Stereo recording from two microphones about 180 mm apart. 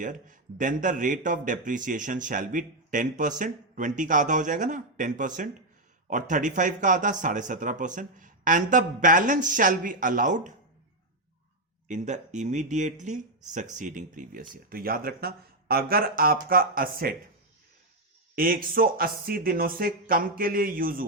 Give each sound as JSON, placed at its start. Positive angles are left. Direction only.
{"t": 0.0, "sound": "speech", "side_deg": -45}
{"t": 11.9, "sound": "speech", "side_deg": -40}
{"t": 18.3, "sound": "speech", "side_deg": -50}